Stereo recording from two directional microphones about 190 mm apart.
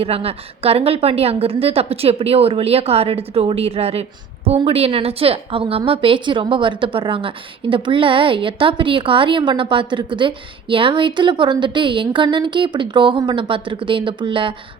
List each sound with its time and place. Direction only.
0.0 s a woman's voice: 30° right (ahead or behind)